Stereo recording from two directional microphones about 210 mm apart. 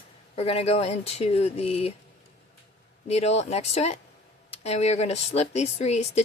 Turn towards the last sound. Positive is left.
turn(degrees=30)  # may be behind; listen again after turning